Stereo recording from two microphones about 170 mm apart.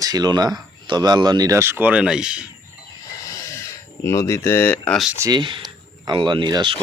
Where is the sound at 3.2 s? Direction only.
15° left (ahead or behind).